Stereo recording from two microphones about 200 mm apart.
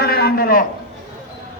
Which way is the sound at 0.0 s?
50° left (ahead or behind).